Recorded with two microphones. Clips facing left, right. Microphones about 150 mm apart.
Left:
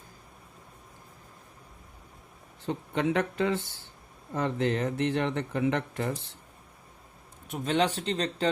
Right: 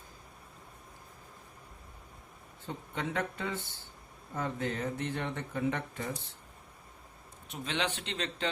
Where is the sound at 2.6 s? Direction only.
80° left.